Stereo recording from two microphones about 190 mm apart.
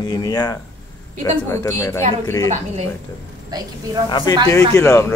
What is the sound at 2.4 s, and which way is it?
Speech, 35° right (ahead or behind).